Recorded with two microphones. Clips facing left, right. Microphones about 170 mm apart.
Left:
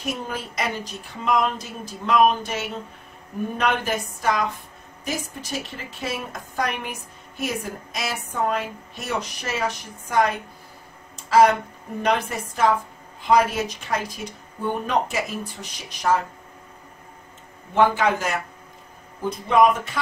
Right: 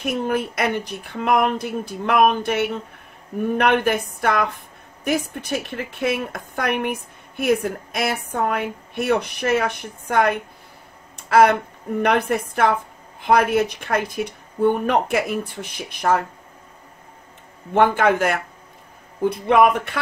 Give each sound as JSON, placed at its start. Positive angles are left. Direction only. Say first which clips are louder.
{"t": 0.0, "sound": "a woman's voice", "louder": "right 7 dB", "side_deg": -60}
{"t": 11.1, "sound": "a sound", "louder": "right 1 dB", "side_deg": -60}
{"t": 12.0, "sound": "a woman's voice", "louder": "right 4 dB", "side_deg": -60}
{"t": 17.7, "sound": "a woman's voice", "louder": "right 3 dB", "side_deg": -55}